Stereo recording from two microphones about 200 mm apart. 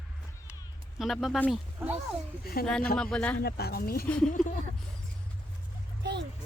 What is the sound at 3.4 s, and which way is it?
Speech, 50° left (ahead or behind).